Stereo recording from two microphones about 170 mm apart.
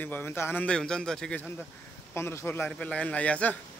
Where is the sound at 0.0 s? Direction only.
10° left (ahead or behind).